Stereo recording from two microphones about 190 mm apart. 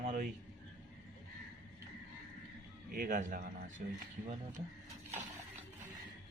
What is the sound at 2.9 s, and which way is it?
Speech, 50° right (ahead or behind).